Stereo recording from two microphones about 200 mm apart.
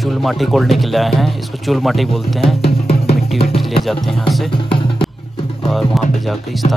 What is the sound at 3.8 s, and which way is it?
Speech, centre (ahead or behind).